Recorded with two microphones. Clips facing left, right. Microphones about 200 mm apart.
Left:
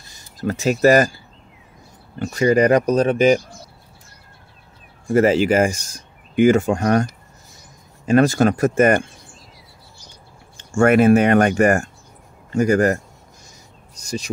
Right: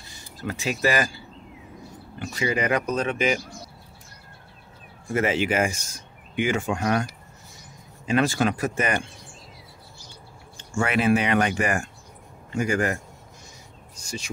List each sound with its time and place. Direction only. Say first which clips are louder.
0.4 s speech: left 9 dB; 45° left (ahead or behind)
5.0 s speech: left 8 dB; 35° left (ahead or behind)
10.6 s speech: left 10 dB; 50° left (ahead or behind)
14.0 s speech: left 8 dB; 40° left (ahead or behind)